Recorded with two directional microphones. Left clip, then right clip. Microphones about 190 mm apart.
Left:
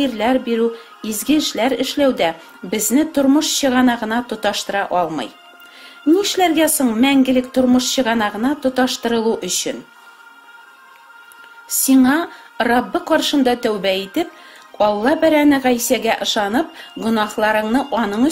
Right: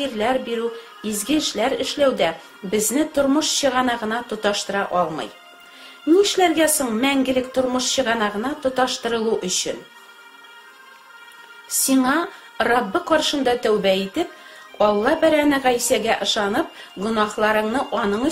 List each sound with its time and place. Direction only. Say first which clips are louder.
0.0 s speech: left 4 dB; 50° left (ahead or behind)
11.7 s speech: left 4 dB; 50° left (ahead or behind)